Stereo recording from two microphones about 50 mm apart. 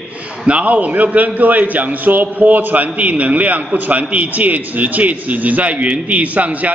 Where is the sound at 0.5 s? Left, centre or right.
Right.